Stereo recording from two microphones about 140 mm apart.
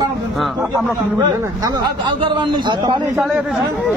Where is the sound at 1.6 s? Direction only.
35° right (ahead or behind).